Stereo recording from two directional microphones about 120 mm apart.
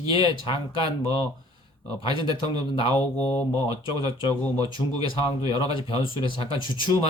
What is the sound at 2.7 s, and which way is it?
Speech, 50° left (ahead or behind).